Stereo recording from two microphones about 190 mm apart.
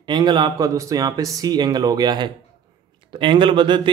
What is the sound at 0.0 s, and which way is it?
Speech, 25° right (ahead or behind).